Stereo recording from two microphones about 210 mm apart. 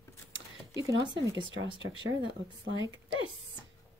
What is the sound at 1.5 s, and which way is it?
A woman's voice, 65° right (ahead or behind).